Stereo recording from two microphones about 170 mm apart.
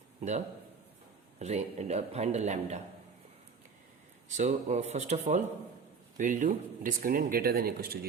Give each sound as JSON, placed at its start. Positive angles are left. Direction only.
{"t": 0.2, "sound": "a man's voice", "side_deg": -40}
{"t": 4.3, "sound": "a man's voice", "side_deg": -45}